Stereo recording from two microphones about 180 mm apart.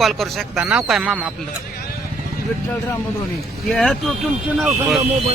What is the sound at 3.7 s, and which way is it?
Speech, centre (ahead or behind).